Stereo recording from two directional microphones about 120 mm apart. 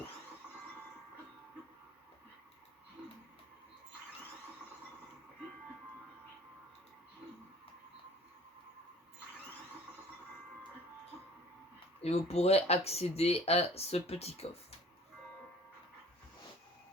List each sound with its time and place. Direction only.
12.0 s speech: 60° left (ahead or behind)